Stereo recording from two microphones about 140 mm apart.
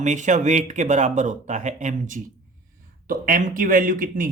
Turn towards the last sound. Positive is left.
turn(degrees=-80)